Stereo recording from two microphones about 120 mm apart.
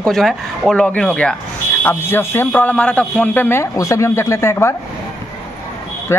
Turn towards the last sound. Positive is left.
turn(degrees=20)  # may be behind; listen again after turning